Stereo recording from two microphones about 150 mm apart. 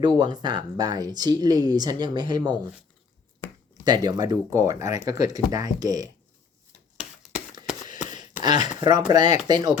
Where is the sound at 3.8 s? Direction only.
25° right (ahead or behind).